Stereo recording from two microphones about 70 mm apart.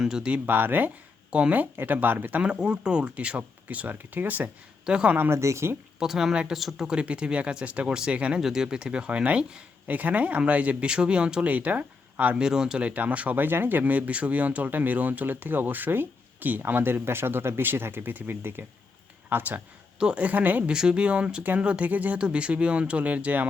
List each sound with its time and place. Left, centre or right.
0.0 s speech: centre
0.4 s speech: right
2.4 s speech: centre
4.9 s speech: centre
5.1 s speech: right
5.4 s speech: right
6.0 s speech: centre
12.9 s speech: right
20.7 s speech: centre